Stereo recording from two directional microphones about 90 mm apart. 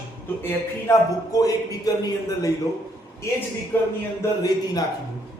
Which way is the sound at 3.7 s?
25° left (ahead or behind).